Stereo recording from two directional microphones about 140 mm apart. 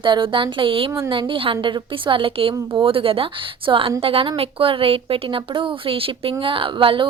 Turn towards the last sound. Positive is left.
turn(degrees=-40)  # may be behind; listen again after turning